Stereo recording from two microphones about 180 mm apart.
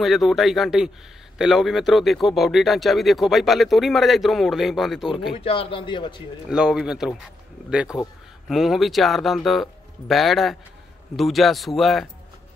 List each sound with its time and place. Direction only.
0.0 s speech: centre (ahead or behind)
5.3 s a man's voice: 30° left (ahead or behind)
6.5 s speech: 5° right (ahead or behind)